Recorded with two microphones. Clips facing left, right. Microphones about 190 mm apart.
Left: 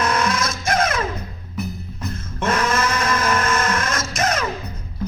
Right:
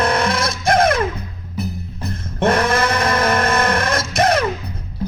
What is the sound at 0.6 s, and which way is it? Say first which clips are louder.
Music: right 6 dB; 55° right (ahead or behind).